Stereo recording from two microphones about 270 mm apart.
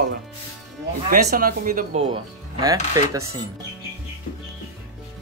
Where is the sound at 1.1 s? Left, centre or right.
Right.